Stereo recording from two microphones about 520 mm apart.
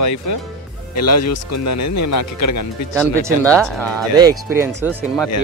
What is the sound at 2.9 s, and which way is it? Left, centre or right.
Speech, centre.